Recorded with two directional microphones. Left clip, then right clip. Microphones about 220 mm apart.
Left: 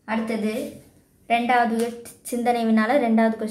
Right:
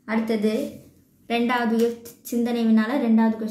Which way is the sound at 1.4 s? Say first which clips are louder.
Right 1 dB; 20° left (ahead or behind).